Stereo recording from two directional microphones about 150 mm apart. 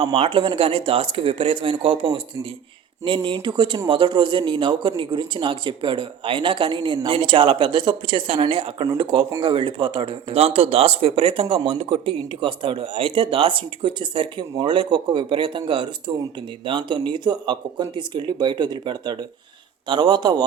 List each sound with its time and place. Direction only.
0.0 s speech: 35° right (ahead or behind)
3.2 s a man's voice: 30° right (ahead or behind)